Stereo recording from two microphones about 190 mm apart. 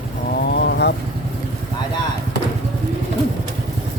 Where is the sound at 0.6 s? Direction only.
60° left (ahead or behind).